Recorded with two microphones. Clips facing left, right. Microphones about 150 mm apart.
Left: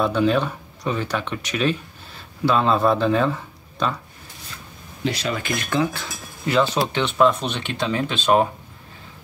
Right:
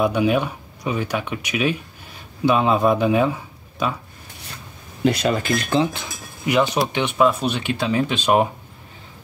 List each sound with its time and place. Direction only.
0.0 s speech: 15° right (ahead or behind)
5.0 s speech: 50° right (ahead or behind); by 5.9 s 30° right (ahead or behind)
5.9 s speech: 15° right (ahead or behind)